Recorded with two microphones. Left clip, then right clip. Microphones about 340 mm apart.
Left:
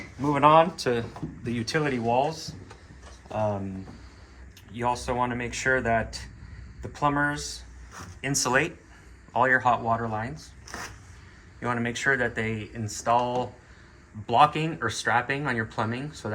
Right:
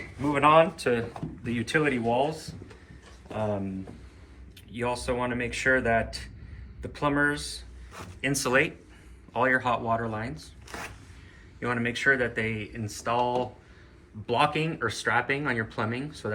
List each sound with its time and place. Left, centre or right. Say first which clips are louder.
0.2 s speech: left 1 dB; left
4.7 s speech: left 2 dB; centre
11.6 s speech: right 1 dB; centre